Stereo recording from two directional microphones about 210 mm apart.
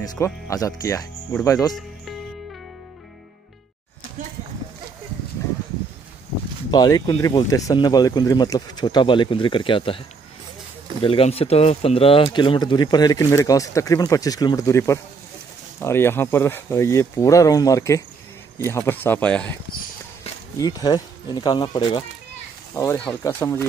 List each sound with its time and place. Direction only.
0.0 s speech: 15° left (ahead or behind)
6.7 s speech: 20° left (ahead or behind)
20.5 s speech: 15° left (ahead or behind)
22.8 s speech: 10° left (ahead or behind)